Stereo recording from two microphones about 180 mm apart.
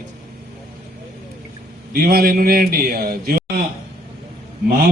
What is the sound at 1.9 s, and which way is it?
Speech, 55° right (ahead or behind).